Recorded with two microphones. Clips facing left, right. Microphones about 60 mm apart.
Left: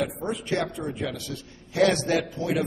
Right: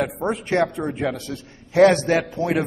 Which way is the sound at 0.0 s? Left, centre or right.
Right.